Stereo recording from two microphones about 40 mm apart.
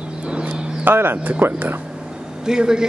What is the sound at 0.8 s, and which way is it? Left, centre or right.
Speech, right.